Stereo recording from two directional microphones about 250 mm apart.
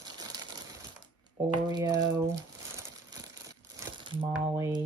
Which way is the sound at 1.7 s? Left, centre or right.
Centre.